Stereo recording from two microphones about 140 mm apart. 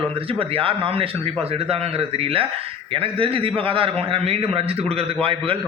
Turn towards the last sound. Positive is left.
turn(degrees=-45)  # may be behind; listen again after turning